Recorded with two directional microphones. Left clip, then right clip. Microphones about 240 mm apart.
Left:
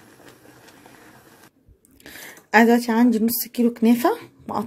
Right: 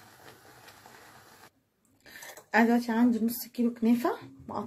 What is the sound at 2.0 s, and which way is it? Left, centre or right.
Speech, left.